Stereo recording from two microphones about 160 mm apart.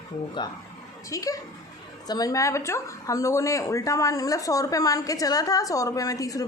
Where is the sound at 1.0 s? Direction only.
20° left (ahead or behind).